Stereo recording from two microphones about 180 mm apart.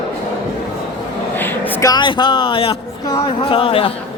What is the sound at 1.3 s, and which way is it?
Speech, 10° left (ahead or behind).